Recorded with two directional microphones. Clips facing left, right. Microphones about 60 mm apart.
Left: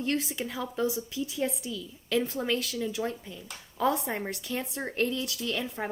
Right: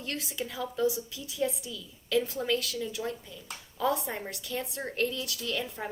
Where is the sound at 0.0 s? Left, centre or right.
Left.